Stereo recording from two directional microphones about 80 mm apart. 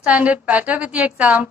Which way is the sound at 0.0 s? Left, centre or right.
Centre.